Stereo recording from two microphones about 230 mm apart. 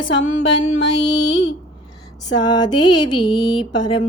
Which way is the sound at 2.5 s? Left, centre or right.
Centre.